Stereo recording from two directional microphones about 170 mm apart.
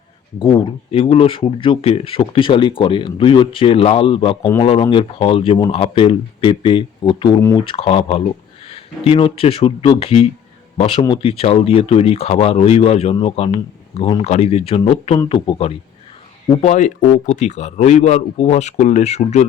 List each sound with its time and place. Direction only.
0.3 s speech: 30° left (ahead or behind)
16.6 s speech: 40° left (ahead or behind)